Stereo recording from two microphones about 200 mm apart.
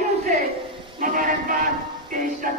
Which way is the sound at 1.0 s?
45° right (ahead or behind).